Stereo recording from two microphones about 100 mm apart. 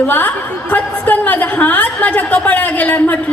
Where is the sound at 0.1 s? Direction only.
15° left (ahead or behind).